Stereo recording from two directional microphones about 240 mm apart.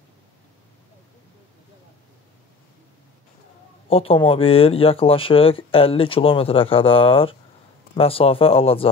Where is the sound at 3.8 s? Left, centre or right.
Left.